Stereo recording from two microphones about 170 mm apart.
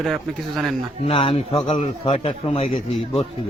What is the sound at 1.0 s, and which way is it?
A man's voice, 35° left (ahead or behind).